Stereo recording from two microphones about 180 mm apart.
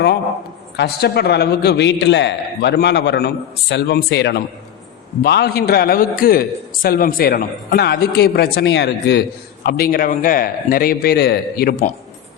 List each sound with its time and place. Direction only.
0.8 s a man's voice: 65° left (ahead or behind)
9.6 s a man's voice: 55° left (ahead or behind)